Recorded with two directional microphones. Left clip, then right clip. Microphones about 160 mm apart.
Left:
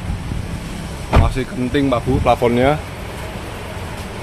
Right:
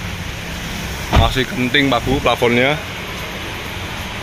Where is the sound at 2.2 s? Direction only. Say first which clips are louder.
Left 1 dB; 10° left (ahead or behind).